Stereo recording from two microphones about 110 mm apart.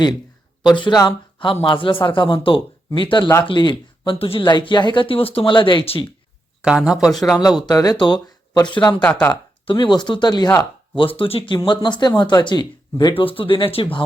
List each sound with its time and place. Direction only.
0.6 s speech: 45° left (ahead or behind)
4.4 s speech: 40° left (ahead or behind); by 6.1 s 60° left (ahead or behind)
6.6 s speech: 10° right (ahead or behind)
7.3 s speech: 35° left (ahead or behind)
10.9 s speech: 50° left (ahead or behind)